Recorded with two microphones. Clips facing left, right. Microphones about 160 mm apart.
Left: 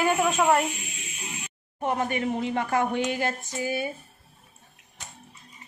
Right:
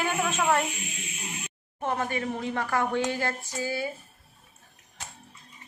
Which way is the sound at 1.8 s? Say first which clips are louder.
Left 3 dB; 15° left (ahead or behind).